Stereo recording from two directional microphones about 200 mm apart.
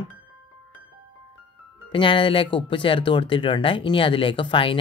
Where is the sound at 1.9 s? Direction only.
25° left (ahead or behind).